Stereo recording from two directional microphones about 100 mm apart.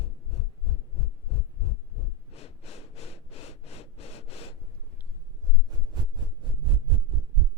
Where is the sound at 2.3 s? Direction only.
90° left.